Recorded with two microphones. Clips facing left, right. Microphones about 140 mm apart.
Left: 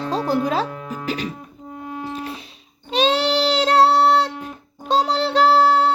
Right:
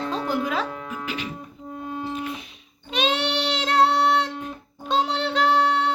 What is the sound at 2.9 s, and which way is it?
Child singing, 35° left (ahead or behind).